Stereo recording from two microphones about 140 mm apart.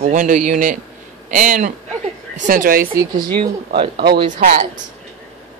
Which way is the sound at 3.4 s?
40° right (ahead or behind).